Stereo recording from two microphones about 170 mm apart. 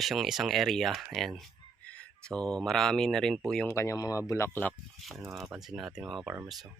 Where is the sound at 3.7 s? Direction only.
15° left (ahead or behind); by 6.3 s centre (ahead or behind).